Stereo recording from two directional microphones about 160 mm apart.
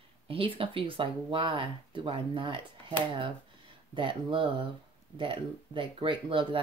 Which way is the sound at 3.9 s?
30° right (ahead or behind).